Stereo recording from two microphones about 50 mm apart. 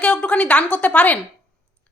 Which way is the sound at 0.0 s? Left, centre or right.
Left.